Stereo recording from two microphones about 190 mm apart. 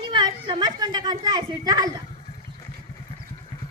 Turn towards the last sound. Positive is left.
turn(degrees=25)  # may be behind; listen again after turning